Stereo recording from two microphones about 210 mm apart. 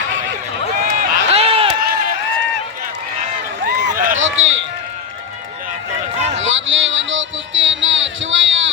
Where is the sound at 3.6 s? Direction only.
40° right (ahead or behind).